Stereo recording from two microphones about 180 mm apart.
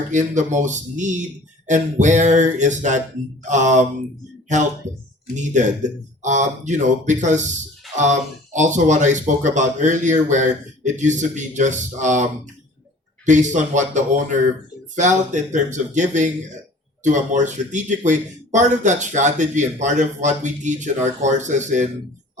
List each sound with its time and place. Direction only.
0.1 s speech: 45° right (ahead or behind)
7.9 s a sound: centre (ahead or behind)
8.5 s speech: 40° right (ahead or behind)
13.2 s speech: 45° right (ahead or behind)